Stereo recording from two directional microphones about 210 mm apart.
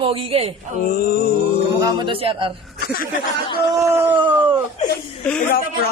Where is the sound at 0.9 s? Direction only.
45° left (ahead or behind).